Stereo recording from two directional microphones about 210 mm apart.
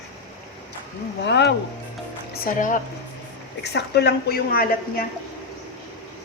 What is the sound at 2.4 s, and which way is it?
Speech, 40° left (ahead or behind).